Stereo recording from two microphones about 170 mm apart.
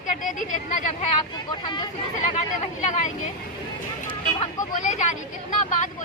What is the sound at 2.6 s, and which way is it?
Speech, 45° left (ahead or behind).